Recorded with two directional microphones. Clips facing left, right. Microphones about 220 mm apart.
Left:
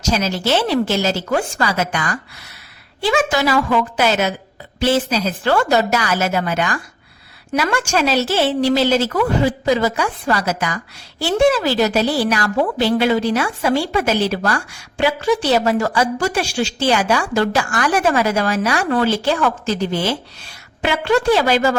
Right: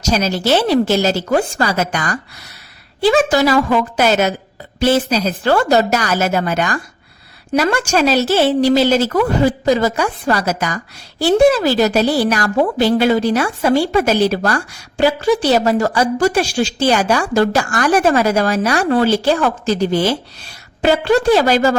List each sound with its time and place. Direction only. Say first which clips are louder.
0.1 s a woman's voice: right 3 dB; 40° right (ahead or behind)